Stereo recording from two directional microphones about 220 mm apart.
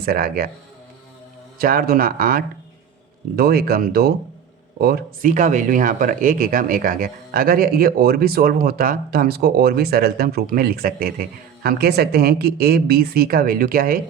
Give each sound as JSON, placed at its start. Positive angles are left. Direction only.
{"t": 0.0, "sound": "speech", "side_deg": -45}
{"t": 1.5, "sound": "speech", "side_deg": -40}